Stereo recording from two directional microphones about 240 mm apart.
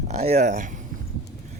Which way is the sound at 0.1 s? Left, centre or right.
Right.